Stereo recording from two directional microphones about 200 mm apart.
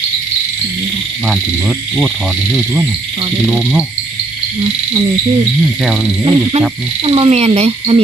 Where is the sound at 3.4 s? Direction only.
5° right (ahead or behind).